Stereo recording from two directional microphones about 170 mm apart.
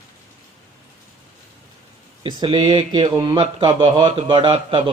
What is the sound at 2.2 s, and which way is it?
Speech, 30° right (ahead or behind).